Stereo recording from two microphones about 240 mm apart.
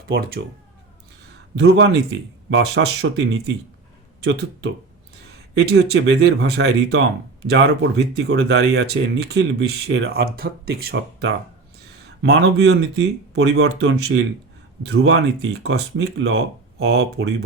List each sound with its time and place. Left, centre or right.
0.1 s speech: right
1.5 s speech: right
15.6 s speech: right